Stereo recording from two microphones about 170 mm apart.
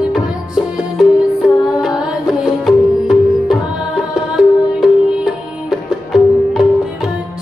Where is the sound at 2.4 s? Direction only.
5° right (ahead or behind).